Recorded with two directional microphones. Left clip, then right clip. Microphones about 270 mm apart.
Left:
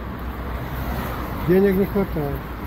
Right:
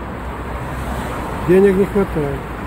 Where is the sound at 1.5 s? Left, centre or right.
Centre.